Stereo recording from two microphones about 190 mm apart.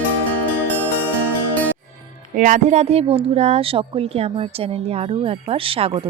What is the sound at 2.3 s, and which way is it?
A woman's voice, 45° right (ahead or behind).